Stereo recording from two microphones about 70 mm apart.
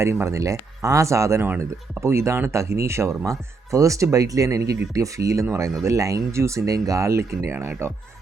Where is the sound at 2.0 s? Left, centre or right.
Right.